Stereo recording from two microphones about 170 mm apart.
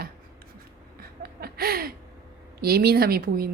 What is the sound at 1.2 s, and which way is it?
Chuckle, 65° right (ahead or behind).